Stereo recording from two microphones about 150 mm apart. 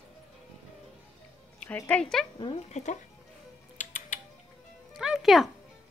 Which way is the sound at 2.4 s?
35° left (ahead or behind).